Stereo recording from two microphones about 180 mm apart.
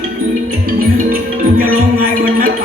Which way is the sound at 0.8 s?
50° right (ahead or behind).